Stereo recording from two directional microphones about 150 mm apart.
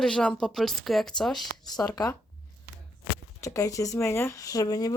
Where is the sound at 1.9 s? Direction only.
25° left (ahead or behind).